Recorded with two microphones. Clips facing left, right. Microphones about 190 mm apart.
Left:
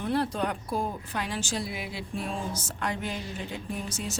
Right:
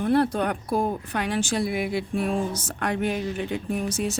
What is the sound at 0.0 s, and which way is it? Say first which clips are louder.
Speech: right 6 dB; 60° right (ahead or behind).